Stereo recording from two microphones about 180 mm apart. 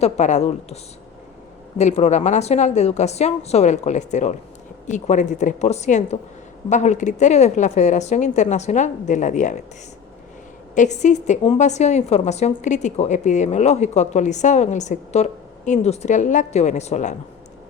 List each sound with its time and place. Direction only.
0.0 s a woman's voice: 40° left (ahead or behind)
1.8 s a woman's voice: 40° left (ahead or behind)
10.8 s a woman's voice: 40° left (ahead or behind)